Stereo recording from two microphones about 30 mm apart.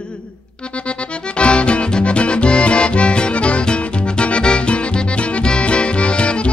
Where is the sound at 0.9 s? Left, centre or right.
Left.